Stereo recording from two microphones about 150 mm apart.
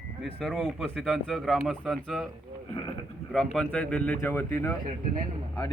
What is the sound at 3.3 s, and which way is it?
A man's voice, centre (ahead or behind).